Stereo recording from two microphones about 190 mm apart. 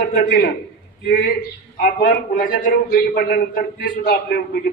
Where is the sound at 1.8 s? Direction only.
45° left (ahead or behind).